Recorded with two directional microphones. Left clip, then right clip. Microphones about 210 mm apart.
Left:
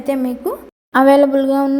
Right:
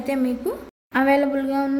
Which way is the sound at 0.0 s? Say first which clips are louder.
Left 4 dB; 15° left (ahead or behind).